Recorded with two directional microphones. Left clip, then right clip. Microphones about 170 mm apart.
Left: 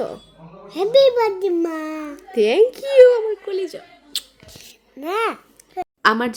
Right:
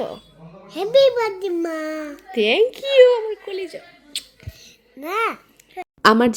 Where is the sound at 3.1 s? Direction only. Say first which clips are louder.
Left 2 dB; 30° left (ahead or behind).